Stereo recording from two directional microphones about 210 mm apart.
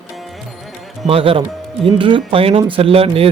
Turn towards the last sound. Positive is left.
turn(degrees=-25)  # may be behind; listen again after turning